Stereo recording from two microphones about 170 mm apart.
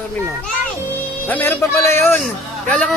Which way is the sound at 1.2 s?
10° left (ahead or behind).